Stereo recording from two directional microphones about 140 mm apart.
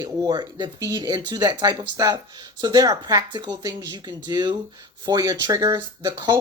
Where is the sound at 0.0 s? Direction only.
30° right (ahead or behind).